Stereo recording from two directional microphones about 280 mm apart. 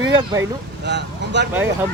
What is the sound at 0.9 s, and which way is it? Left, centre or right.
Vehicle, right.